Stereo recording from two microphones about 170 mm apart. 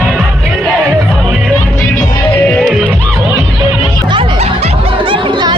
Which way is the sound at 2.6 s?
Centre (ahead or behind).